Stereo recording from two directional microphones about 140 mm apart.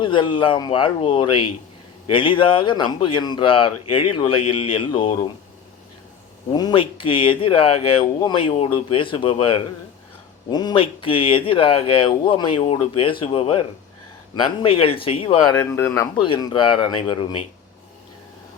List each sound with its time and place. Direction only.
0.0 s speech: 35° left (ahead or behind)
6.5 s speech: 30° left (ahead or behind)
15.5 s speech: 20° left (ahead or behind)
16.0 s speech: 35° left (ahead or behind)